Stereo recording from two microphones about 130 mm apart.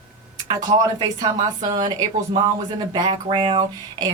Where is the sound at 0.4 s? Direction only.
35° right (ahead or behind).